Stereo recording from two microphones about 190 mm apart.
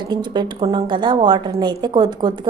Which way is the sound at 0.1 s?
25° right (ahead or behind).